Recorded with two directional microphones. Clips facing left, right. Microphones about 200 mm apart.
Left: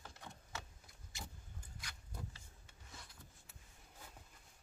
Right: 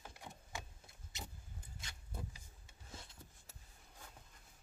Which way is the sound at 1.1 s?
20° right (ahead or behind).